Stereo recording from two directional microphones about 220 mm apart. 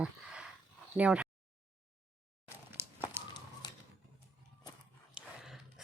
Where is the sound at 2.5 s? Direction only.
10° right (ahead or behind).